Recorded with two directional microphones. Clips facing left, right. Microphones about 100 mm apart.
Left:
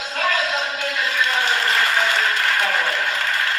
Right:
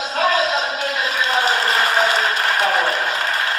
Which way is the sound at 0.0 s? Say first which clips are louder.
Right 4 dB; 25° right (ahead or behind).